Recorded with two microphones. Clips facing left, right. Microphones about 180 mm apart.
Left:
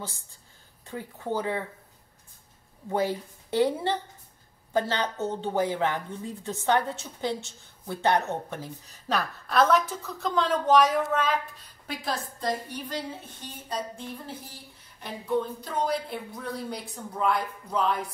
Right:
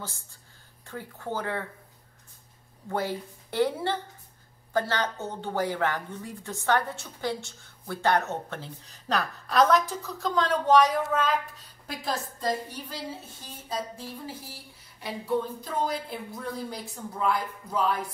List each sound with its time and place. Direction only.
0.8 s a woman's voice: 15° left (ahead or behind)
2.9 s a woman's voice: 15° left (ahead or behind); by 17.9 s 5° right (ahead or behind)